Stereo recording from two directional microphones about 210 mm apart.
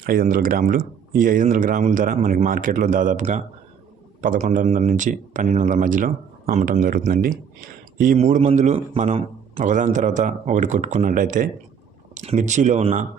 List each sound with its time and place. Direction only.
0.0 s a man's voice: 45° right (ahead or behind)